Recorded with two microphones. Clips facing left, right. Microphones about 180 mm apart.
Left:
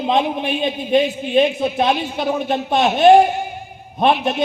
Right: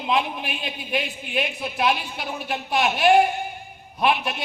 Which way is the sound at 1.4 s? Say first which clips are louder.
Left 6 dB; 45° left (ahead or behind).